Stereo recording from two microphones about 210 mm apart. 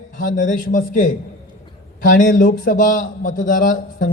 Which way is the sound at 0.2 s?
40° left (ahead or behind).